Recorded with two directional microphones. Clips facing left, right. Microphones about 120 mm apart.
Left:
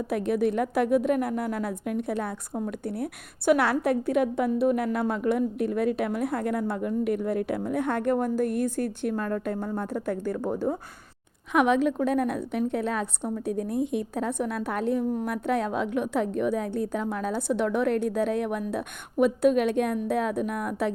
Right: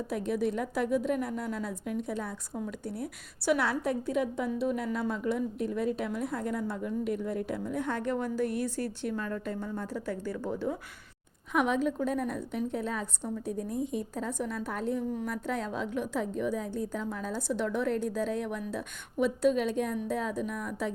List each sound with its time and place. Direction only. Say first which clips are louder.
0.1 s a woman's voice: left 6 dB; 65° left (ahead or behind)
11.5 s a woman's voice: left 6 dB; 75° left (ahead or behind)